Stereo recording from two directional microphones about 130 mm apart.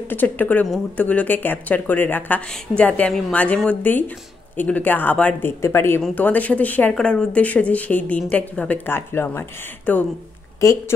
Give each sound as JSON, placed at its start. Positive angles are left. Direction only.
{"t": 0.1, "sound": "speech", "side_deg": 15}